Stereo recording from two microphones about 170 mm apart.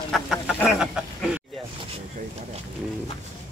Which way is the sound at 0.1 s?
Centre (ahead or behind).